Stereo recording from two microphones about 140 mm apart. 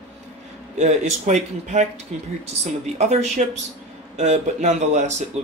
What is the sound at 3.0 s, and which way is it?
Speech, 50° right (ahead or behind).